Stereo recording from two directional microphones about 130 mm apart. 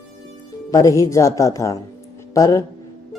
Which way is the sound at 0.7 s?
25° left (ahead or behind).